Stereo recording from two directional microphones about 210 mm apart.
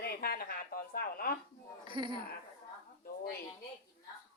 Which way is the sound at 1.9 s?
20° right (ahead or behind).